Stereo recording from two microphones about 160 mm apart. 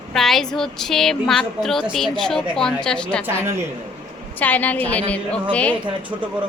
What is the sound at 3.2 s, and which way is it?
Speech, 15° right (ahead or behind).